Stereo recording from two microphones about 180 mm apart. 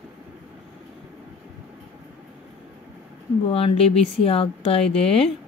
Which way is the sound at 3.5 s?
30° left (ahead or behind).